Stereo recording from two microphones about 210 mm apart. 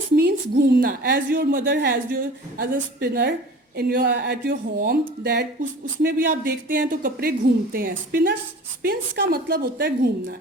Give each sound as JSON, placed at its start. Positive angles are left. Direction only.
{"t": 0.2, "sound": "speech", "side_deg": -50}